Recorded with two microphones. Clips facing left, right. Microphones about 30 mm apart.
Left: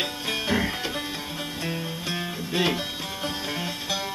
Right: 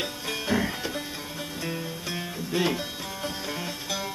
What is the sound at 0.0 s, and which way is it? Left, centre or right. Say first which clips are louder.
Music: left 3 dB; left.